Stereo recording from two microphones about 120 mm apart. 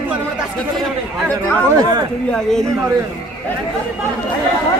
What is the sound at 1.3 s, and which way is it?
Speech, 30° right (ahead or behind).